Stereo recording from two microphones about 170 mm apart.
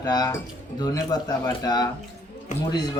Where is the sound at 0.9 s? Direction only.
20° left (ahead or behind).